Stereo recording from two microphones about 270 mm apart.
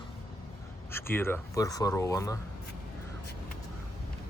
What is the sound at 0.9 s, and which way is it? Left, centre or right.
Speech, centre.